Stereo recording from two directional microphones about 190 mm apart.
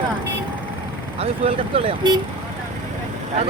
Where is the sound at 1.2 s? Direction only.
30° right (ahead or behind).